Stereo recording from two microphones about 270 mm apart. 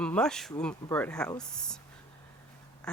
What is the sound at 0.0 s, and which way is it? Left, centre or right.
Speech, centre.